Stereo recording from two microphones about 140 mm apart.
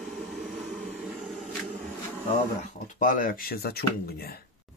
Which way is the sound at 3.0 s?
75° left (ahead or behind).